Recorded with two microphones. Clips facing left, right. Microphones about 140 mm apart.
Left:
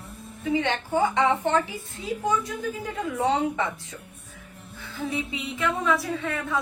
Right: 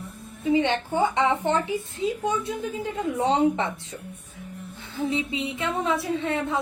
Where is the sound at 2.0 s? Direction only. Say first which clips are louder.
Left 1 dB; 25° right (ahead or behind).